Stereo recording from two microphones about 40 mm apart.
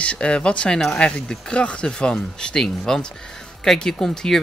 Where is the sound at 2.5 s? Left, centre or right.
Centre.